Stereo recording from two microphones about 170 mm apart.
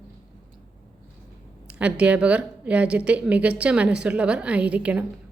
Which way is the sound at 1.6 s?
5° right (ahead or behind).